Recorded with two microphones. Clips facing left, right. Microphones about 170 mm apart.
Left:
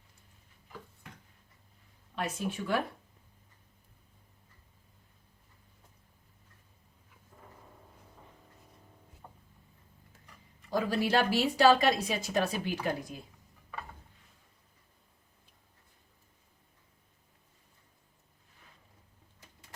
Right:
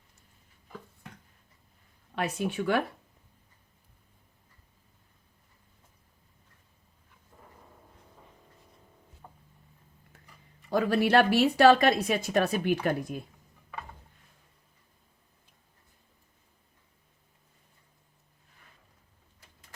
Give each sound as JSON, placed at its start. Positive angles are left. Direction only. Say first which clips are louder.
{"t": 2.1, "sound": "speech", "louder": "right 4 dB", "side_deg": -65}
{"t": 10.7, "sound": "speech", "louder": "right 5 dB", "side_deg": -60}